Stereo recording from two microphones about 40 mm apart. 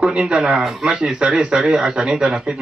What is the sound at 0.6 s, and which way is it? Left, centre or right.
Speech, centre.